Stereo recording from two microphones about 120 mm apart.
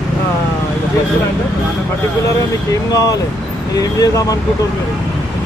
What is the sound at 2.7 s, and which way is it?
Speech, 30° left (ahead or behind).